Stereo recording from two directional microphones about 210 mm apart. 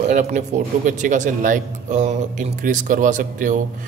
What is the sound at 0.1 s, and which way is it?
Speech, 35° right (ahead or behind).